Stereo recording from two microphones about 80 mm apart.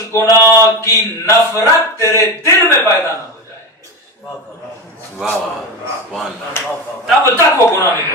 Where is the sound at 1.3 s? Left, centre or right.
Left.